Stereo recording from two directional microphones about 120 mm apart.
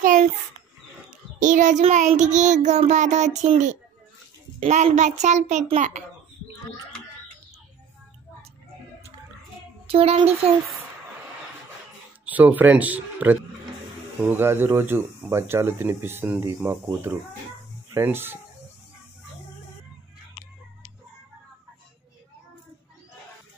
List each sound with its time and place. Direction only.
0.0 s a sound: 90° right
1.4 s child singing: 90° right
4.6 s a child's voice: 65° right (ahead or behind)
9.8 s speech: 55° right (ahead or behind)
12.3 s speech: 15° right (ahead or behind)